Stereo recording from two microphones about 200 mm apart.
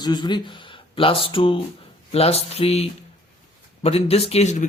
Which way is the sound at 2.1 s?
30° left (ahead or behind).